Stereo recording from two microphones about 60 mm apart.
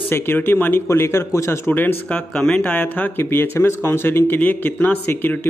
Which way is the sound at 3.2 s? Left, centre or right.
Left.